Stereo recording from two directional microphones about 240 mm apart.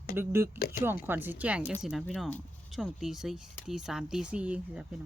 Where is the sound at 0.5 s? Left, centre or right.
Left.